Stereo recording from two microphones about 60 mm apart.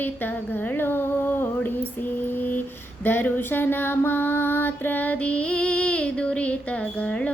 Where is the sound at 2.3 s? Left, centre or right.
Left.